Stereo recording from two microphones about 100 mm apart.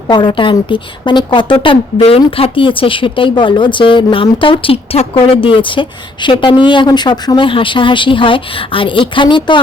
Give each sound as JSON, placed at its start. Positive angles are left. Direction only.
{"t": 0.1, "sound": "a woman's voice", "side_deg": 55}
{"t": 1.6, "sound": "speech", "side_deg": 75}